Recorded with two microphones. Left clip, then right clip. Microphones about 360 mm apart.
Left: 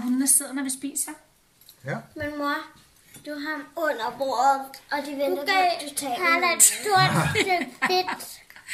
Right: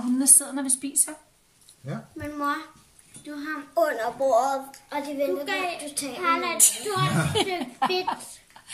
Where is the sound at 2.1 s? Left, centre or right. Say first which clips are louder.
Even; centre.